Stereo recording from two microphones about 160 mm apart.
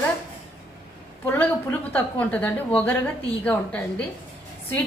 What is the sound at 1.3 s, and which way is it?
A woman's voice, 10° left (ahead or behind).